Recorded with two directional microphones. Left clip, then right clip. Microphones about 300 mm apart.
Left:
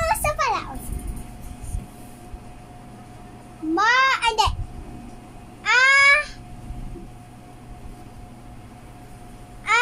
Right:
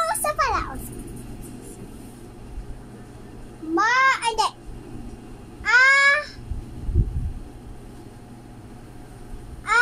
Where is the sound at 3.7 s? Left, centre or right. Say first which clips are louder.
Left 1 dB; centre.